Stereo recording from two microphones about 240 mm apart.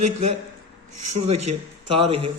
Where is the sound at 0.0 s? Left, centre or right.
Right.